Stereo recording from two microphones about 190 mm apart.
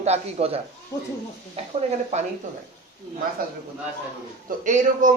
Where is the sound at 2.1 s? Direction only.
35° right (ahead or behind).